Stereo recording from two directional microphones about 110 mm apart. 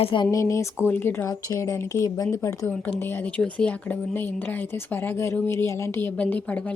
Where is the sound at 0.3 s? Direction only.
30° left (ahead or behind).